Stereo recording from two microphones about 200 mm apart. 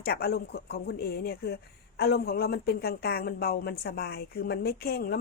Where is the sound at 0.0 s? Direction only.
50° left (ahead or behind).